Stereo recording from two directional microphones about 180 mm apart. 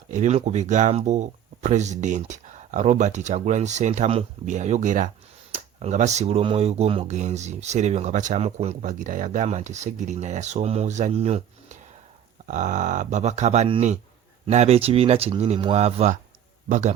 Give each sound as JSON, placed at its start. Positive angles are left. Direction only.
{"t": 0.1, "sound": "speech", "side_deg": -40}